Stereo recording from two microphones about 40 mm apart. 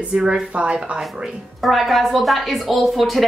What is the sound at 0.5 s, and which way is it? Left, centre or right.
Speech, right.